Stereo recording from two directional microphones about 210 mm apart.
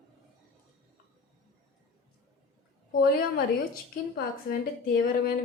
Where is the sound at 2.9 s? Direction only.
40° left (ahead or behind).